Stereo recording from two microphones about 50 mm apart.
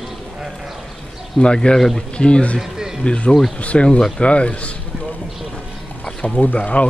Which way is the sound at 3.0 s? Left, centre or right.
Left.